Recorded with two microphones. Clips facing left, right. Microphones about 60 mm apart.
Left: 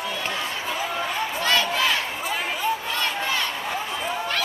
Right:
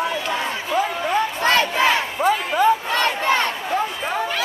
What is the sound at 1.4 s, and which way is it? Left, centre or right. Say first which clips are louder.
Crowd: right 4 dB; right.